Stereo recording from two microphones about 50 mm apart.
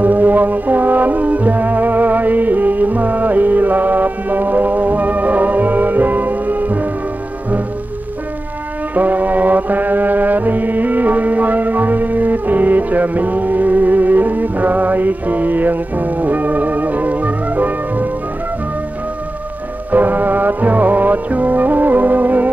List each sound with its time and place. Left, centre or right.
0.0 s music: right
8.9 s music: right
19.9 s music: right